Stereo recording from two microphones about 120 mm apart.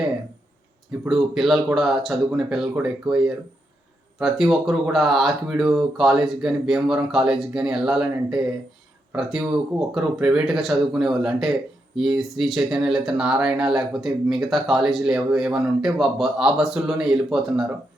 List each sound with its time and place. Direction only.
1.0 s speech: centre (ahead or behind)